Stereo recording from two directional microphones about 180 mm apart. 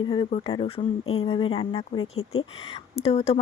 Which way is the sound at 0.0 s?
25° left (ahead or behind).